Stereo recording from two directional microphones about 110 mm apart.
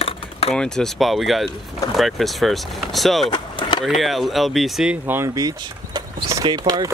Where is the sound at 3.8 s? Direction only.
Centre (ahead or behind).